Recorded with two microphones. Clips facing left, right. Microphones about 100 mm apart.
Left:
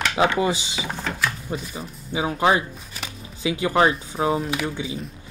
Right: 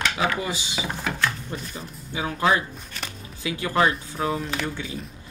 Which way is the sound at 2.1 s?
20° left (ahead or behind).